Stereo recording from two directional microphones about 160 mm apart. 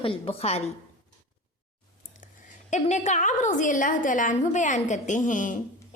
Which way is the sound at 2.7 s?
45° left (ahead or behind).